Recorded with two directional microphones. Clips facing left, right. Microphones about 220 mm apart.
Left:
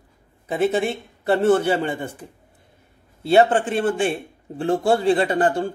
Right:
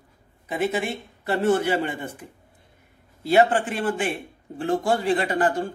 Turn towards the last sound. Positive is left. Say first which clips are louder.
# left 3 dB
turn(degrees=30)  # may be behind; listen again after turning